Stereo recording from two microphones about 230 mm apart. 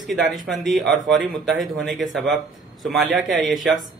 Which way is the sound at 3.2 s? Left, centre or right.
Right.